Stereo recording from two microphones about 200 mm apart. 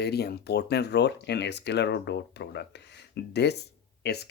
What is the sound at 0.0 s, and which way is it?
Speech, 55° left (ahead or behind).